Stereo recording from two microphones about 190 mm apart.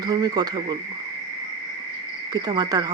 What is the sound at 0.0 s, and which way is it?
Speech, 20° right (ahead or behind).